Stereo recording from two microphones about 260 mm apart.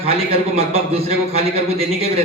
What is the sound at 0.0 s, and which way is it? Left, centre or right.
A man's voice, right.